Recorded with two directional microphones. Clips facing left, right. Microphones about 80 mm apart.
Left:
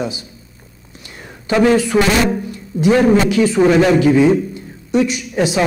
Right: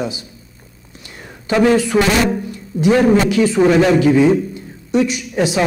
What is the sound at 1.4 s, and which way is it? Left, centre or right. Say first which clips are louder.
A man's voice: even; centre.